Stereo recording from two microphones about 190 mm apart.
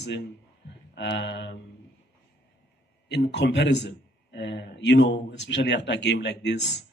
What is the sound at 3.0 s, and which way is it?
Speech, 65° left (ahead or behind).